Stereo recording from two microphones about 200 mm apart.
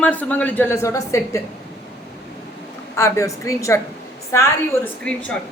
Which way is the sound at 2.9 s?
15° left (ahead or behind).